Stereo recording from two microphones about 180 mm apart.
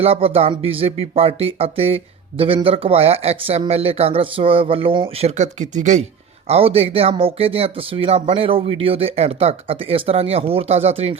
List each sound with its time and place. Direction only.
0.0 s speech: 35° right (ahead or behind)
5.4 s speech: 40° right (ahead or behind)